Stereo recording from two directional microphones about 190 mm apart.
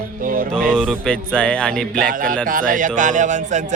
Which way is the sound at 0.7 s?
5° left (ahead or behind).